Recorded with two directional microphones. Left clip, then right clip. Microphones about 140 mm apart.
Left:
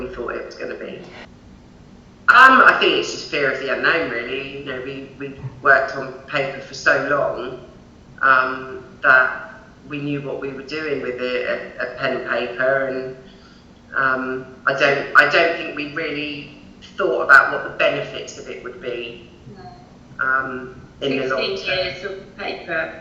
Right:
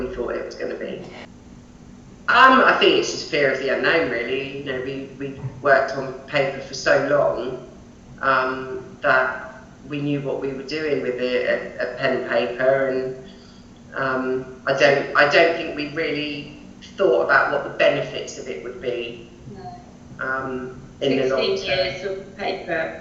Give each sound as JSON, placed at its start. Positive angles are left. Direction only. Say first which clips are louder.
{"t": 0.0, "sound": "speech", "louder": "right 1 dB", "side_deg": -20}
{"t": 1.0, "sound": "speech", "louder": "even", "side_deg": 0}
{"t": 2.2, "sound": "a man's voice", "louder": "left 4 dB", "side_deg": -20}
{"t": 8.2, "sound": "a man's voice", "louder": "left 4 dB", "side_deg": -20}
{"t": 20.1, "sound": "a man's voice", "louder": "left 5 dB", "side_deg": -20}